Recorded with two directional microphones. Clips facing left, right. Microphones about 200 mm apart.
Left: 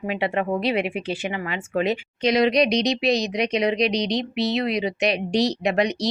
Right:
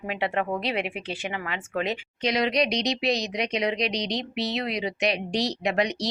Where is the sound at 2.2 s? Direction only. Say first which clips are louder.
Left 5 dB; 20° left (ahead or behind).